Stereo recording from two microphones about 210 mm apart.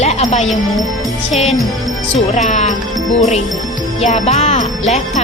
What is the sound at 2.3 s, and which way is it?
Speech, 35° left (ahead or behind).